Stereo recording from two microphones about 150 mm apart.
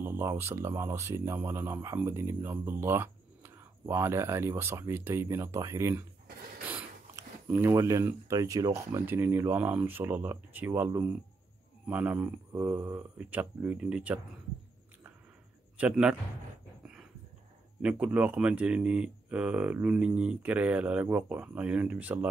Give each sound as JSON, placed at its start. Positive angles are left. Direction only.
{"t": 0.0, "sound": "speech", "side_deg": -15}
{"t": 7.2, "sound": "speech", "side_deg": -15}
{"t": 15.8, "sound": "speech", "side_deg": -5}
{"t": 17.8, "sound": "speech", "side_deg": -10}